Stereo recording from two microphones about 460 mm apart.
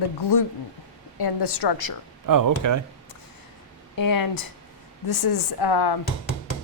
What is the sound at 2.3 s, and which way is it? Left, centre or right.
Speech, right.